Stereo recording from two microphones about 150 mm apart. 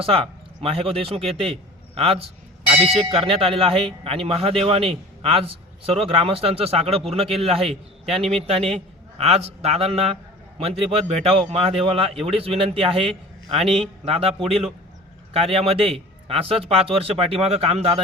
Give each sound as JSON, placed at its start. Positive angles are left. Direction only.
{"t": 0.0, "sound": "speech", "side_deg": -40}
{"t": 2.0, "sound": "a sound", "side_deg": -40}
{"t": 2.9, "sound": "a man's voice", "side_deg": -40}